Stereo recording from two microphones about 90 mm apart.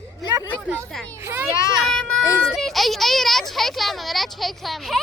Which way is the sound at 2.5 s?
Centre (ahead or behind).